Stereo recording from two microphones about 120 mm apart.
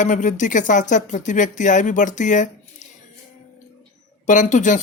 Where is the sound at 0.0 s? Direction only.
90° left.